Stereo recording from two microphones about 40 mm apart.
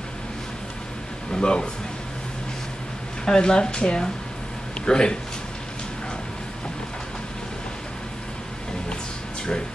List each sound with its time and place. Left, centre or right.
1.3 s speech: left
3.3 s speech: left